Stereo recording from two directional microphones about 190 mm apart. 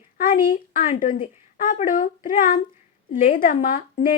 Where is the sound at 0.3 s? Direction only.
50° left (ahead or behind).